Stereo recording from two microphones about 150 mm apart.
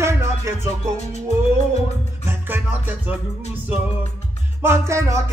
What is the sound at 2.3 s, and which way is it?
Music, 10° right (ahead or behind).